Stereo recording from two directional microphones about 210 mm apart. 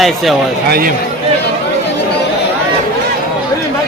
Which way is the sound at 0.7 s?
45° right (ahead or behind).